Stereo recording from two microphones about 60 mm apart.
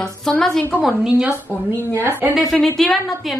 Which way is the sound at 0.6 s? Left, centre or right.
Left.